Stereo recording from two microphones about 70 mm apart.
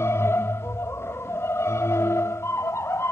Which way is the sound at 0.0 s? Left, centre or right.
Left.